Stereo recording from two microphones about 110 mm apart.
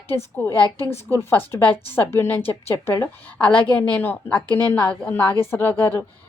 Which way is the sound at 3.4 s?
10° left (ahead or behind).